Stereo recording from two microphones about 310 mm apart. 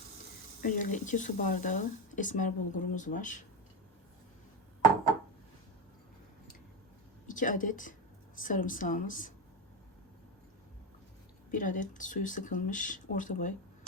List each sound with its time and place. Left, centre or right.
0.6 s speech: left
7.3 s a woman's voice: left
11.5 s speech: left